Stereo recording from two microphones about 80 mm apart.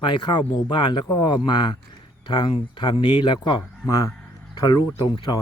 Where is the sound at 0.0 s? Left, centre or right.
Left.